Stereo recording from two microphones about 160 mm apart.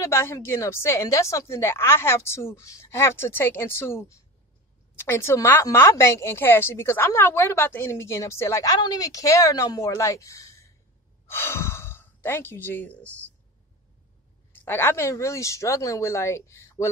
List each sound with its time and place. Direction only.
0.0 s a woman's voice: 15° left (ahead or behind)
14.5 s a woman's voice: 15° left (ahead or behind)